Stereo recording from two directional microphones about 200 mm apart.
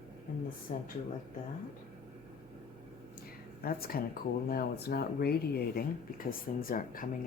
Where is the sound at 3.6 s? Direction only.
50° left (ahead or behind).